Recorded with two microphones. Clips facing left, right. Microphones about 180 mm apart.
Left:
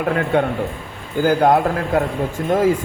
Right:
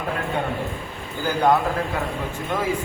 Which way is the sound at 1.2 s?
50° left (ahead or behind).